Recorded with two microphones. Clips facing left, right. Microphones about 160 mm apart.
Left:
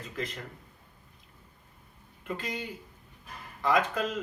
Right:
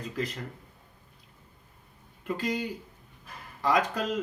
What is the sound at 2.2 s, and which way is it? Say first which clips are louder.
Speech: right 5 dB; 35° right (ahead or behind).